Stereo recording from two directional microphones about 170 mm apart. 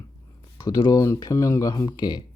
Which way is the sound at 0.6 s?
25° left (ahead or behind).